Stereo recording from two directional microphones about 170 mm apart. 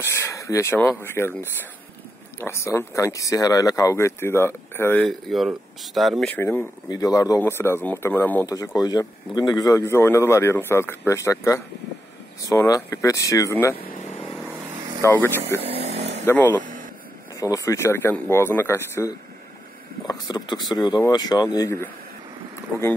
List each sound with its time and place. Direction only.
0.0 s speech: 15° left (ahead or behind)
5.3 s speech: centre (ahead or behind)
6.3 s speech: 10° left (ahead or behind)
14.4 s vehicle: 15° right (ahead or behind)
15.0 s speech: 10° left (ahead or behind)
15.6 s vehicle: 35° right (ahead or behind)
16.3 s speech: 10° left (ahead or behind)
16.6 s a sound: 50° right (ahead or behind)
17.4 s speech: 20° left (ahead or behind)